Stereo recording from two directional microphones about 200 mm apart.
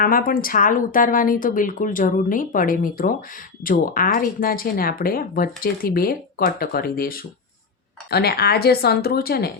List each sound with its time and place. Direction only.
0.0 s speech: 45° left (ahead or behind)